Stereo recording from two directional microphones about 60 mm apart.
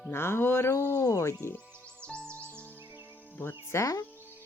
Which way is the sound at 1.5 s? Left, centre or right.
Centre.